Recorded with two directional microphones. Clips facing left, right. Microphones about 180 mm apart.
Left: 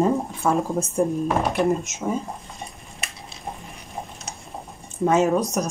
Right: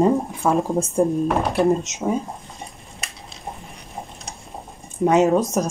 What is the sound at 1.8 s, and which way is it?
Speech, 20° right (ahead or behind).